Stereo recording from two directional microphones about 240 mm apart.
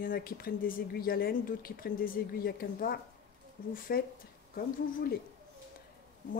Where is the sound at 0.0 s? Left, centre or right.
Left.